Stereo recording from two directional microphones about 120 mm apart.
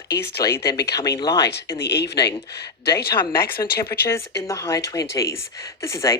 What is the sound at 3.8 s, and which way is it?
Speech, 25° left (ahead or behind).